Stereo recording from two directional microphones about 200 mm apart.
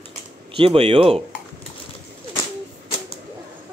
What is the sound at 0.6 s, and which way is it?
Speech, 30° right (ahead or behind).